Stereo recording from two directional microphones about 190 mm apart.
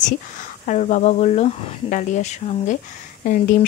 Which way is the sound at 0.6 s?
40° left (ahead or behind).